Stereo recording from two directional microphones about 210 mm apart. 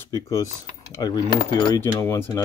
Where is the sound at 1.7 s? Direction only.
10° left (ahead or behind).